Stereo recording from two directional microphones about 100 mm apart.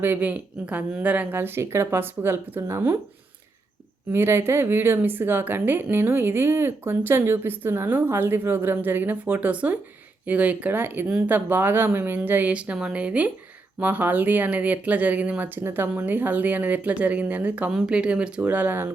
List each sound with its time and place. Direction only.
0.0 s speech: 20° right (ahead or behind)
4.1 s speech: 25° right (ahead or behind)